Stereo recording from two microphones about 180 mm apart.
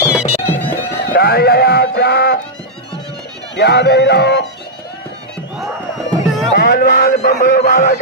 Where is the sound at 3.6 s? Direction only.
70° left (ahead or behind).